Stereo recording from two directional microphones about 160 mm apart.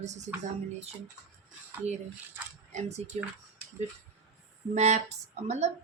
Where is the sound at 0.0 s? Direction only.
45° right (ahead or behind).